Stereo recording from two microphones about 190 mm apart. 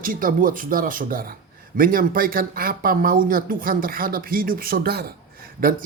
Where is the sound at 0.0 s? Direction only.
45° right (ahead or behind).